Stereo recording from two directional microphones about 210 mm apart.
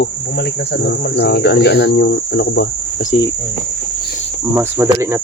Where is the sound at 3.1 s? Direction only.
30° left (ahead or behind).